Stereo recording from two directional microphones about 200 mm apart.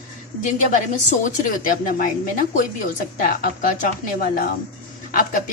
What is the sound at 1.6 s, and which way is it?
A woman's voice, 45° left (ahead or behind).